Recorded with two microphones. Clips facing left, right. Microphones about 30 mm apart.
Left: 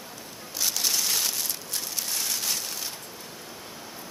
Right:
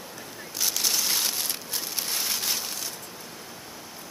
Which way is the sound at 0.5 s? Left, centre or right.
Centre.